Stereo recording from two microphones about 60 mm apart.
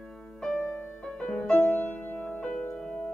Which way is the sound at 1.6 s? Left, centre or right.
Left.